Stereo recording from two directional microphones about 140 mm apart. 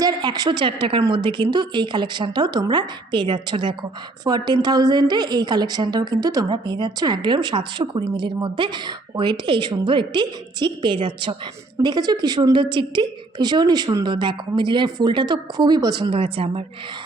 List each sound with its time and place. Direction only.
0.0 s a woman's voice: 30° right (ahead or behind)